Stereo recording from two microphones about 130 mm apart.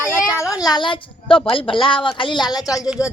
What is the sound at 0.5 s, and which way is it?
Speech, 30° left (ahead or behind).